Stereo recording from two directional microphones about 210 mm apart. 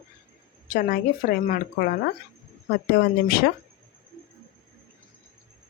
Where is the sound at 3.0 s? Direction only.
50° left (ahead or behind).